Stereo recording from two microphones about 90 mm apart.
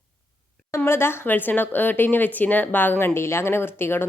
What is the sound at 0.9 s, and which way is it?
A woman's voice, 25° left (ahead or behind).